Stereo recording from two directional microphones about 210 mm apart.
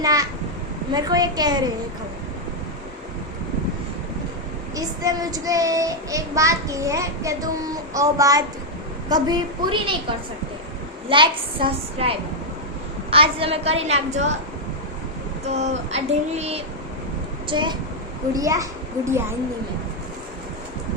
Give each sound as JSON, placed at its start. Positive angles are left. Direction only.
{"t": 0.0, "sound": "child singing", "side_deg": -15}
{"t": 0.9, "sound": "a woman's voice", "side_deg": -20}
{"t": 4.7, "sound": "child singing", "side_deg": -15}
{"t": 9.0, "sound": "a woman's voice", "side_deg": -20}
{"t": 11.1, "sound": "a woman's voice", "side_deg": -25}
{"t": 15.4, "sound": "child singing", "side_deg": -30}
{"t": 17.5, "sound": "a woman's voice", "side_deg": -20}